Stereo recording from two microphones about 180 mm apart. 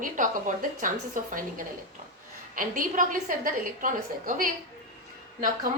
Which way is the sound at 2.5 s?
50° right (ahead or behind).